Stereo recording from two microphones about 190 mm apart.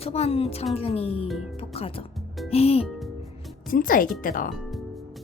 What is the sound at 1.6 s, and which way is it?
Music, 30° left (ahead or behind).